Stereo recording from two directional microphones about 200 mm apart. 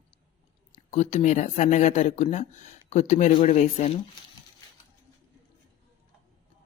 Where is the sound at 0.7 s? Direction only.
35° left (ahead or behind).